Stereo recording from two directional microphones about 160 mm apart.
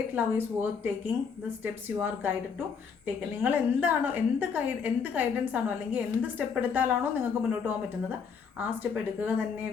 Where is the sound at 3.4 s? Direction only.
10° right (ahead or behind).